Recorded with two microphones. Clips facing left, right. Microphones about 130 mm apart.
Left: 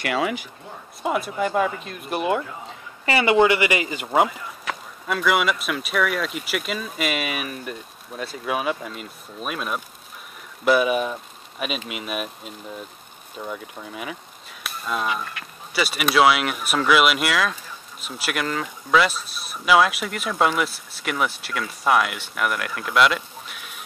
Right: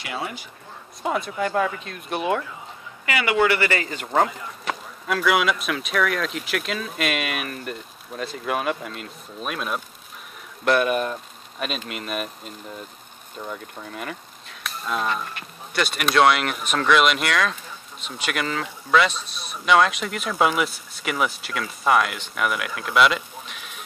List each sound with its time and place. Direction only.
0.0 s speech: 90° left
1.0 s speech: 5° left (ahead or behind)
3.1 s speech: 25° left (ahead or behind); by 23.8 s centre (ahead or behind)